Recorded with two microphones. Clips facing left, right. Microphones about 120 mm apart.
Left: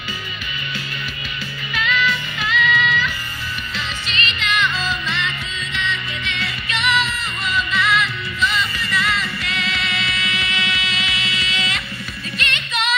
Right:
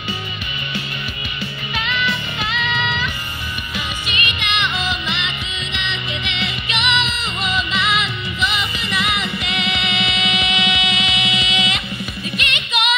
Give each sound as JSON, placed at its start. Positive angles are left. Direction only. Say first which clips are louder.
{"t": 1.7, "sound": "music", "louder": "left 2 dB", "side_deg": -20}